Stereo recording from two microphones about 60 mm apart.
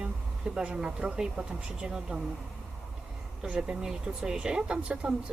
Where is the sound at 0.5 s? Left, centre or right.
Centre.